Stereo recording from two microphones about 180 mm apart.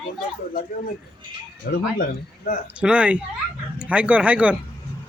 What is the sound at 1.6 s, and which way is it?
Speech, 55° left (ahead or behind).